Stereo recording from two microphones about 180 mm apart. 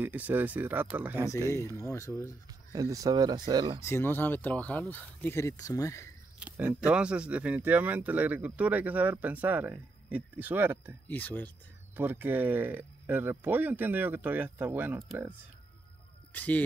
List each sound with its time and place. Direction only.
0.0 s speech: 10° right (ahead or behind)
1.8 s speech: 15° left (ahead or behind)
2.7 s speech: 20° right (ahead or behind)
3.8 s speech: 15° left (ahead or behind)
6.4 s speech: 10° right (ahead or behind)
11.1 s speech: 10° left (ahead or behind)
11.9 s speech: 10° right (ahead or behind)
16.3 s speech: 10° left (ahead or behind)